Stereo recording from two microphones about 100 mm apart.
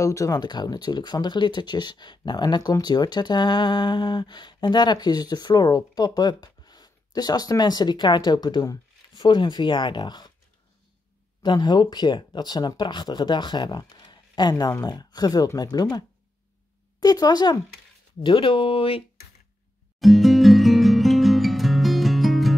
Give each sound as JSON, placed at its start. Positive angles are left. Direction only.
{"t": 0.0, "sound": "speech", "side_deg": 30}
{"t": 11.4, "sound": "speech", "side_deg": 45}
{"t": 18.2, "sound": "speech", "side_deg": 55}
{"t": 20.0, "sound": "music", "side_deg": 0}